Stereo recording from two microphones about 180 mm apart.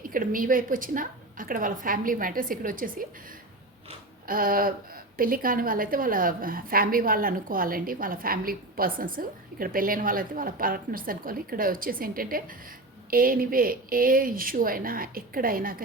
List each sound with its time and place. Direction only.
0.1 s a woman's voice: 50° right (ahead or behind)
4.3 s a woman's voice: 50° right (ahead or behind)